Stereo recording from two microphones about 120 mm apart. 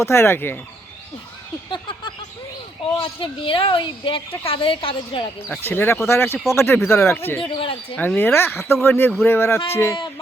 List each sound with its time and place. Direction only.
0.0 s speech: 20° left (ahead or behind)
1.7 s a sound: 45° left (ahead or behind)
3.0 s speech: 45° left (ahead or behind)
5.6 s speech: 20° left (ahead or behind)
7.4 s speech: 50° left (ahead or behind)
7.9 s speech: 15° left (ahead or behind)